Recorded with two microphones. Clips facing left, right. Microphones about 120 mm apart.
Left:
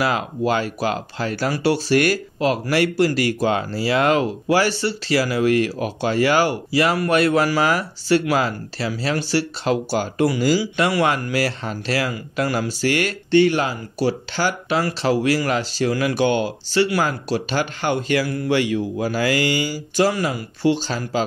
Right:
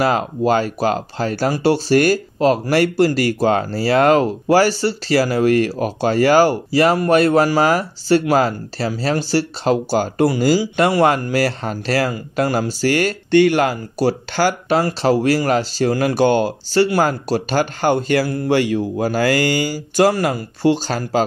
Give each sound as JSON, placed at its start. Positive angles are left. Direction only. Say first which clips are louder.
{"t": 0.0, "sound": "speech", "louder": "right 4 dB", "side_deg": -40}
{"t": 11.3, "sound": "speech", "louder": "right 4 dB", "side_deg": -45}